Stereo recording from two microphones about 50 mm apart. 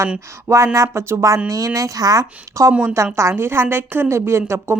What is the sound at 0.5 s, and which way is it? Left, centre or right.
Speech, right.